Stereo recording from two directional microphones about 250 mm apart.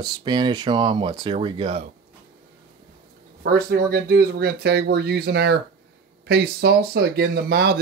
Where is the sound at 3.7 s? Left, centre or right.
Right.